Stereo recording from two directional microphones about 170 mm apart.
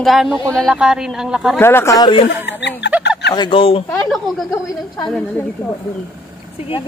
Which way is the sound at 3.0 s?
85° left.